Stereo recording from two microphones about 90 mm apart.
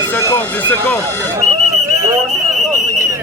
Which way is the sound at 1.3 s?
35° right (ahead or behind).